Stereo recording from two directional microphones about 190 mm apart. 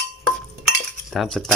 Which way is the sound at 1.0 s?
Centre (ahead or behind).